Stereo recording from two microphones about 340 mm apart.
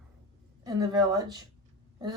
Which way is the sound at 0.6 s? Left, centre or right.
Centre.